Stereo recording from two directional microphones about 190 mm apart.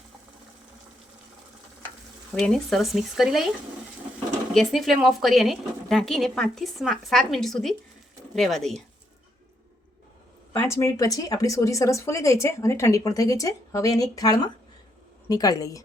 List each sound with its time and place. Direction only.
2.4 s speech: centre (ahead or behind)
4.5 s speech: centre (ahead or behind)
10.5 s a woman's voice: 15° left (ahead or behind)